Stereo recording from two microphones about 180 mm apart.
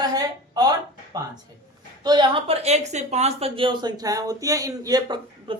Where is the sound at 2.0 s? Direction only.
25° right (ahead or behind).